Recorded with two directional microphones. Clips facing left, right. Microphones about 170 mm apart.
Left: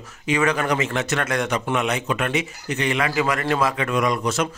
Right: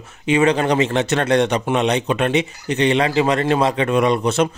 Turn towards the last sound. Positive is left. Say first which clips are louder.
# right 5 dB
turn(degrees=-30)  # may be behind; listen again after turning